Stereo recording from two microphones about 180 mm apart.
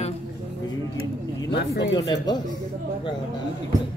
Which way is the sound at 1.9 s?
25° left (ahead or behind).